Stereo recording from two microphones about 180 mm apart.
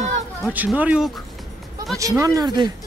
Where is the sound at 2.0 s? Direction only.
20° right (ahead or behind).